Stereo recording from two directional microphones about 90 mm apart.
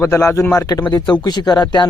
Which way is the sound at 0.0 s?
35° left (ahead or behind).